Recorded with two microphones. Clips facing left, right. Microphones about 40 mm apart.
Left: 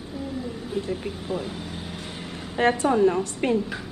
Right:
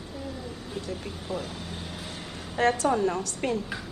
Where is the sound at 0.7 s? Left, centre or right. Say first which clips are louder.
Left 7 dB; left.